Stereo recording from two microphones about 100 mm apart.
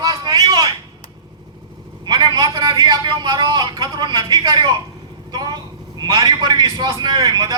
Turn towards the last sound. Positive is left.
turn(degrees=-40)  # may be behind; listen again after turning